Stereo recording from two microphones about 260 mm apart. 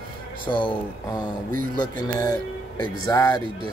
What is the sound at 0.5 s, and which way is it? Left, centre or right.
Speech, centre.